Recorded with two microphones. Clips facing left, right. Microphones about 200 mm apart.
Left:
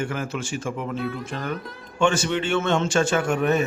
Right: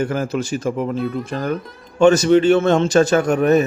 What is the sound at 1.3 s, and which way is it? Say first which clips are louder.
Speech: right 7 dB; 40° right (ahead or behind).